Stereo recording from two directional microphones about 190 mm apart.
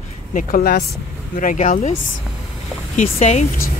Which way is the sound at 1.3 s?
45° left (ahead or behind).